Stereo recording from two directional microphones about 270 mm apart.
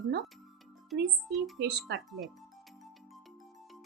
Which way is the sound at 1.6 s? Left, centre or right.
Right.